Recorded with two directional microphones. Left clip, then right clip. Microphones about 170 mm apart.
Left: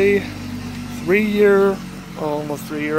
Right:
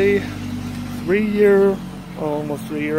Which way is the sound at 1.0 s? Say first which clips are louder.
Left 2 dB; 20° left (ahead or behind).